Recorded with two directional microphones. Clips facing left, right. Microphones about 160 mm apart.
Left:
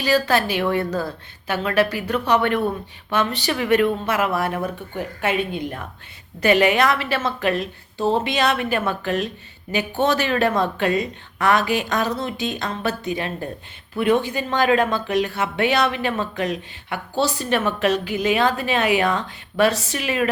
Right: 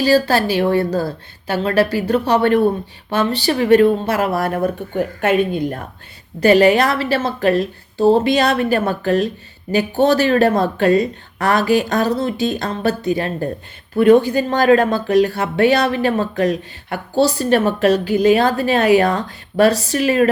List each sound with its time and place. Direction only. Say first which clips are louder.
0.0 s speech: right 5 dB; 35° right (ahead or behind)